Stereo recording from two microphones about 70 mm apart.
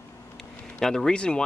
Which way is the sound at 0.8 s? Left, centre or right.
Centre.